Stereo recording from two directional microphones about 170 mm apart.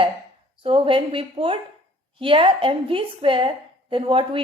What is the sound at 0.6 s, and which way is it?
A woman's voice, 30° right (ahead or behind).